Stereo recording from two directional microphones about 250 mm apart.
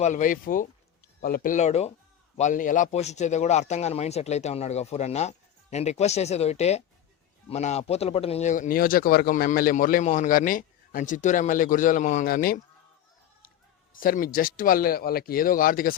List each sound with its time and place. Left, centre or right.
0.0 s a man's voice: left
13.9 s speech: left